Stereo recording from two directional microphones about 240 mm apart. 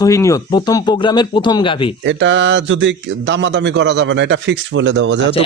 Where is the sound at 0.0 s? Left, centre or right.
Centre.